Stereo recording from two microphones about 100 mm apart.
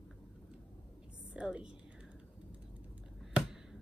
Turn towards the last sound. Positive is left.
turn(degrees=-5)  # may be behind; listen again after turning